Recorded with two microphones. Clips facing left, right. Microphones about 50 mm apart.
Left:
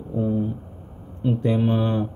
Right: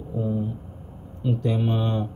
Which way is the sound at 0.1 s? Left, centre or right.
Left.